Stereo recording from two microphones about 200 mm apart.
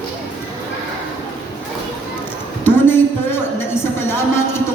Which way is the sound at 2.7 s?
10° left (ahead or behind).